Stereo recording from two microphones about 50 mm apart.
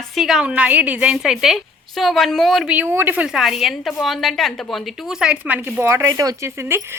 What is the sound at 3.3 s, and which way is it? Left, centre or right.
A woman's voice, centre.